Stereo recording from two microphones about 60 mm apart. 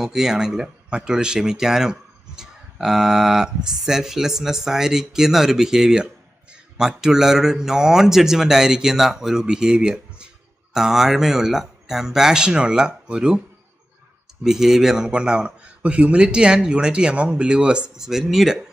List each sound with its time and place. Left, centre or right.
0.0 s a man's voice: centre
14.4 s a man's voice: centre